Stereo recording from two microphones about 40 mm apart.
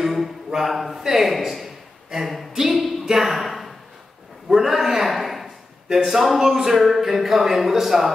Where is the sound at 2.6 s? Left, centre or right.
Centre.